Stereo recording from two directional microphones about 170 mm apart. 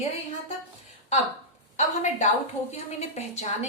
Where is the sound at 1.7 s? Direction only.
45° left (ahead or behind).